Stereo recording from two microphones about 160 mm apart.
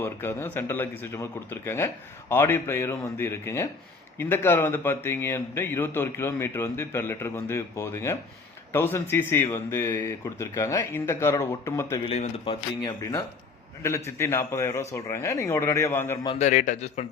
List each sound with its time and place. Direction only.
0.0 s speech: 15° left (ahead or behind)
12.0 s speech: 40° left (ahead or behind)
12.8 s speech: 25° left (ahead or behind)
16.4 s a man's voice: 50° left (ahead or behind)